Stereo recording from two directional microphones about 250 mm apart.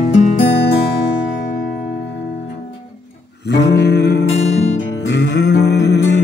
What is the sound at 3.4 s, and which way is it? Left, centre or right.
Music, left.